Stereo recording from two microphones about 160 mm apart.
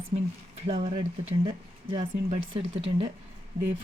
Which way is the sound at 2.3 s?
35° right (ahead or behind).